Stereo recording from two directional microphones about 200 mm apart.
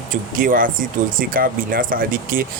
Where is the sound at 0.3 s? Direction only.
45° right (ahead or behind).